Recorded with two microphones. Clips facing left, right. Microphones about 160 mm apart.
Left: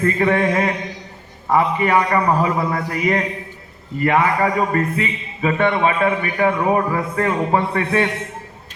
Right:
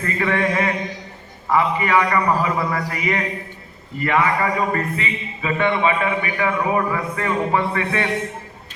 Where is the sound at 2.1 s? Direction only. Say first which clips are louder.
Left 2 dB; 35° left (ahead or behind).